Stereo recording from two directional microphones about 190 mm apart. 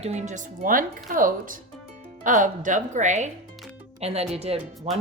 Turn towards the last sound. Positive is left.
turn(degrees=-35)  # may be behind; listen again after turning